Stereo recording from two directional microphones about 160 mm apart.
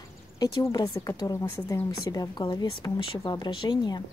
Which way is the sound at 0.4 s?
25° left (ahead or behind).